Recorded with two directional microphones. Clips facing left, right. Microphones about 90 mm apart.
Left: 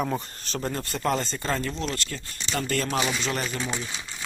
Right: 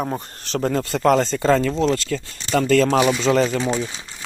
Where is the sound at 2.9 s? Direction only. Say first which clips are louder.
Right 10 dB; 90° right.